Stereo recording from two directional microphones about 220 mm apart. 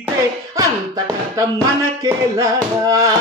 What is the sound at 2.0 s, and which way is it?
Music, 15° right (ahead or behind).